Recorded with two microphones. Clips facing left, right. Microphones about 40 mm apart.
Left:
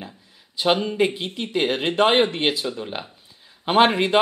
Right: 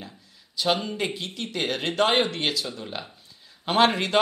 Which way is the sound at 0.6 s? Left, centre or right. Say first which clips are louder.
Left 5 dB; left.